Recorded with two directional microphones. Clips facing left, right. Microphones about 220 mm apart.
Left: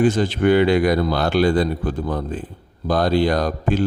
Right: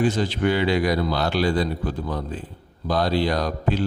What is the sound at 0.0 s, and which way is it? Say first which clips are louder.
A man's voice: left 4 dB; 50° left (ahead or behind).